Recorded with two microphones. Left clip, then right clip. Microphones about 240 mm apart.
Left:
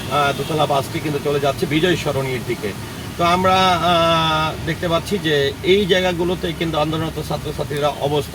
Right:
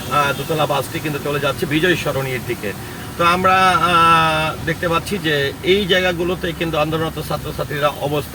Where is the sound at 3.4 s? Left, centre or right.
Centre.